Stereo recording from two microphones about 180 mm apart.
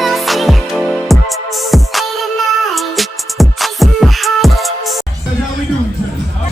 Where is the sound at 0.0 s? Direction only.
Centre (ahead or behind).